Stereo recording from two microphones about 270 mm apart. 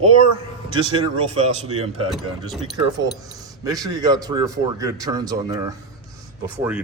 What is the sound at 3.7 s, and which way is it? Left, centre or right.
Speech, centre.